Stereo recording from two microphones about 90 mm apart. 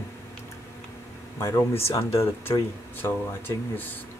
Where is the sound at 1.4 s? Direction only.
35° left (ahead or behind).